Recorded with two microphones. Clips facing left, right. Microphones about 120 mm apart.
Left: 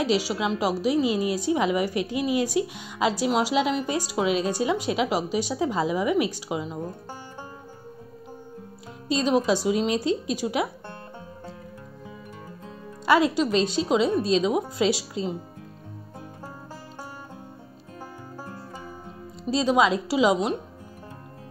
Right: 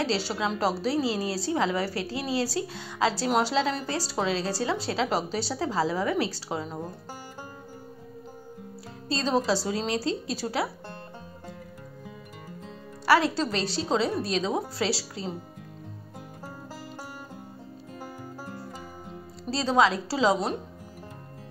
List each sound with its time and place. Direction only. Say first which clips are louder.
0.0 s a woman's voice: left 3 dB; 10° left (ahead or behind)
9.1 s a woman's voice: left 3 dB; 15° left (ahead or behind)
13.0 s a woman's voice: left 2 dB; 20° left (ahead or behind)
19.5 s a woman's voice: left 2 dB; 15° left (ahead or behind)